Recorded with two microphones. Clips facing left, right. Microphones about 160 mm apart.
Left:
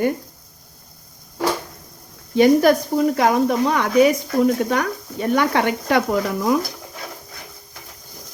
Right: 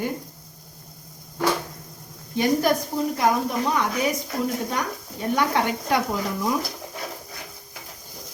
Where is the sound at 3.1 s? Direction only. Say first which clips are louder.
Left 5 dB; 70° left (ahead or behind).